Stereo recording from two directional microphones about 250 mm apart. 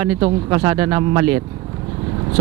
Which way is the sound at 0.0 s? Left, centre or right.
Centre.